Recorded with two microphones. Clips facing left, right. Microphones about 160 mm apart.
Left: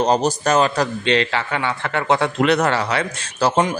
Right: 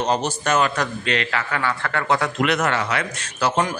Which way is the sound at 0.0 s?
35° left (ahead or behind).